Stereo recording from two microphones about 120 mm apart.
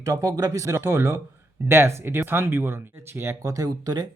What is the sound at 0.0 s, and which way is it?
Speech, 30° right (ahead or behind).